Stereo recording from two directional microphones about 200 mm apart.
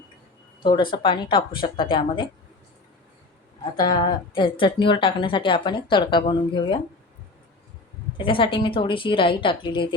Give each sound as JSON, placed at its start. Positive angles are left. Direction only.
{"t": 0.6, "sound": "a woman's voice", "side_deg": 25}
{"t": 3.8, "sound": "a woman's voice", "side_deg": 20}
{"t": 8.2, "sound": "a woman's voice", "side_deg": 25}